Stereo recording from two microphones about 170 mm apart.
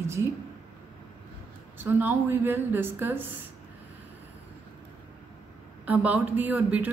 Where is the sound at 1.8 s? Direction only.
10° right (ahead or behind).